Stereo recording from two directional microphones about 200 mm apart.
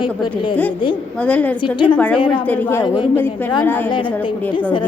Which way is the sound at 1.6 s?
25° left (ahead or behind).